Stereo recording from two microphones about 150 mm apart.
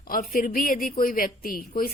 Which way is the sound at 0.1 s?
75° left (ahead or behind).